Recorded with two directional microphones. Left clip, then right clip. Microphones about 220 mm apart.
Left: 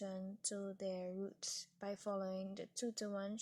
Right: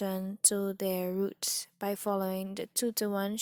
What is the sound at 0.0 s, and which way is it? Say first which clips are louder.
Speech: right 13 dB; 40° right (ahead or behind).